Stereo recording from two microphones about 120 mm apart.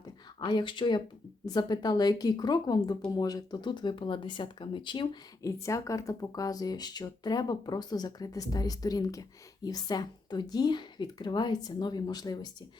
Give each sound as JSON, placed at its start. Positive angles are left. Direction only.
{"t": 0.3, "sound": "speech", "side_deg": 40}
{"t": 5.4, "sound": "speech", "side_deg": 25}